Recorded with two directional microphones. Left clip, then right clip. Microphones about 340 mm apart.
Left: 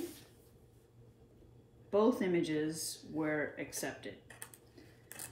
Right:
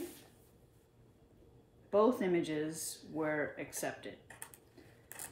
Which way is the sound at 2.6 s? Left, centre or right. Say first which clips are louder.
Left 2 dB; centre.